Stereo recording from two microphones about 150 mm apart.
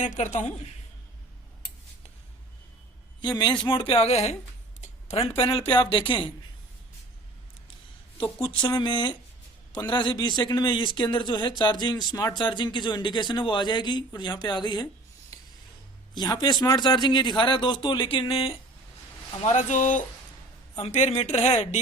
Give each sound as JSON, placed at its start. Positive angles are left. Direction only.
{"t": 0.0, "sound": "a woman's voice", "side_deg": 55}
{"t": 3.2, "sound": "speech", "side_deg": 30}
{"t": 4.8, "sound": "a sound", "side_deg": 45}
{"t": 5.4, "sound": "speech", "side_deg": 40}
{"t": 8.2, "sound": "a man's voice", "side_deg": 30}
{"t": 15.3, "sound": "a sound", "side_deg": 25}
{"t": 16.1, "sound": "speech", "side_deg": 30}
{"t": 19.4, "sound": "a woman's voice", "side_deg": 50}